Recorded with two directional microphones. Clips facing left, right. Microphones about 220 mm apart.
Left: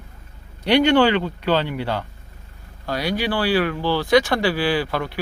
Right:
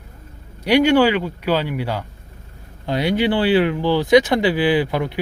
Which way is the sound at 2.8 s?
20° right (ahead or behind).